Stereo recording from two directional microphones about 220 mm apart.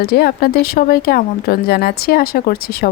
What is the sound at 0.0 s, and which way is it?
Speech, 45° left (ahead or behind).